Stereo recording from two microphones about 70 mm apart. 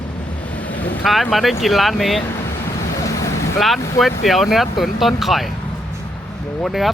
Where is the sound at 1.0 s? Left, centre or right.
Centre.